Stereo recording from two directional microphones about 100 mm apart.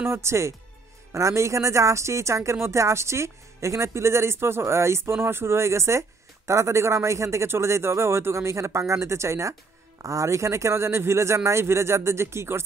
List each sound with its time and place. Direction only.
0.0 s speech: 25° right (ahead or behind)